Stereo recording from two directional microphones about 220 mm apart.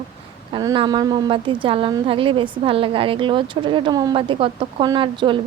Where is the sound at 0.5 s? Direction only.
20° right (ahead or behind).